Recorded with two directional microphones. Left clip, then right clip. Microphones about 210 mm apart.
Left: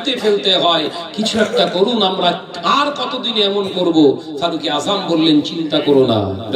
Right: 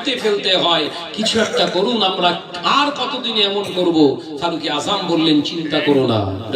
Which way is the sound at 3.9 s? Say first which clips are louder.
Left 4 dB; 60° left (ahead or behind).